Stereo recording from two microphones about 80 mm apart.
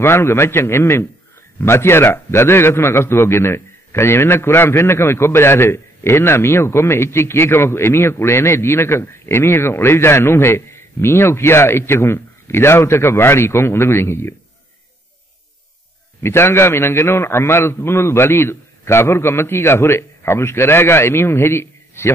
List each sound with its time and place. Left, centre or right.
0.0 s a man's voice: left
16.2 s a man's voice: left